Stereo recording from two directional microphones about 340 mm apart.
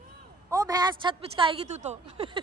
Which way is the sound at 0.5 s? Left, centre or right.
Centre.